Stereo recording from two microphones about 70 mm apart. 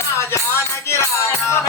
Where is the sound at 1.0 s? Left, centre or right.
Left.